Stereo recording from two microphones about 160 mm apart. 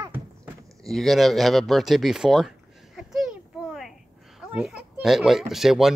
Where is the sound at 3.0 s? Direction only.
Centre (ahead or behind).